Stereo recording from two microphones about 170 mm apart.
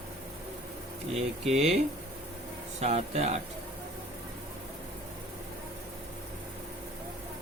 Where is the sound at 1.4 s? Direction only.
40° right (ahead or behind).